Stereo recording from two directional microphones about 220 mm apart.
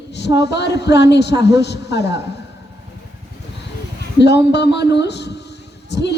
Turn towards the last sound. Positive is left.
turn(degrees=50)  # may be behind; listen again after turning